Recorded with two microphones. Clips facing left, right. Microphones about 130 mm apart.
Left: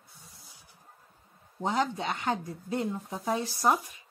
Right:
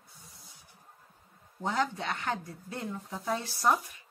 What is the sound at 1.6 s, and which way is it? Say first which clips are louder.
Speech: left 2 dB; 20° left (ahead or behind).